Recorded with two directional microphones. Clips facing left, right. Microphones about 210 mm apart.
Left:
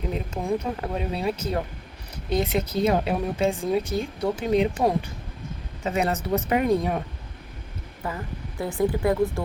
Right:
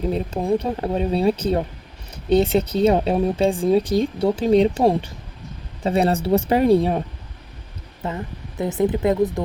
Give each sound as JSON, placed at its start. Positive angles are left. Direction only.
{"t": 0.1, "sound": "speech", "side_deg": -35}
{"t": 8.0, "sound": "speech", "side_deg": -25}